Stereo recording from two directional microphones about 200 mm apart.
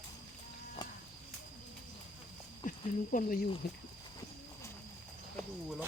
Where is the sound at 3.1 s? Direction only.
45° left (ahead or behind).